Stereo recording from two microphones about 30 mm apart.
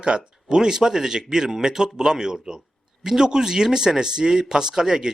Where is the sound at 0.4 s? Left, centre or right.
Right.